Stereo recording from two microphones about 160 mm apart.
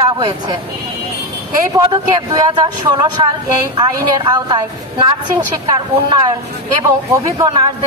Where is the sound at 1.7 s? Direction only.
30° right (ahead or behind).